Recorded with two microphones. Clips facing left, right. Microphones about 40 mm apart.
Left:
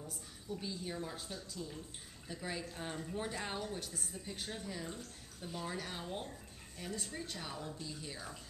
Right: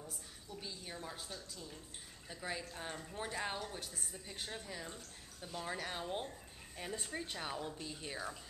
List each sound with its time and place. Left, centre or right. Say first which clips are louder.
0.0 s a woman's voice: left 2 dB; centre
5.7 s speech: right 4 dB; centre